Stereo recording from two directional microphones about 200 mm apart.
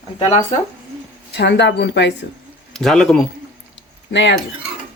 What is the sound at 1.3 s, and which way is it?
Speech, 60° left (ahead or behind).